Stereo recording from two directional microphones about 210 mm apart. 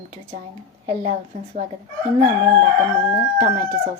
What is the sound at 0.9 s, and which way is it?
Speech, 35° right (ahead or behind).